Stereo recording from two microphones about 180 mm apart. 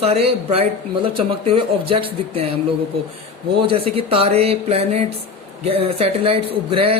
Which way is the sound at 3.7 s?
30° right (ahead or behind).